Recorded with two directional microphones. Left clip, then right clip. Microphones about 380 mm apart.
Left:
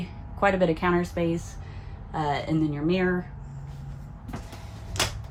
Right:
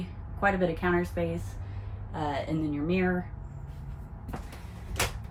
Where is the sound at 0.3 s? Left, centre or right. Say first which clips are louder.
Left 4 dB; left.